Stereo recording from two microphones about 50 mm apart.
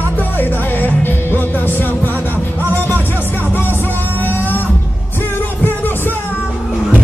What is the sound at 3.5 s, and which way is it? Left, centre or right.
Music, left.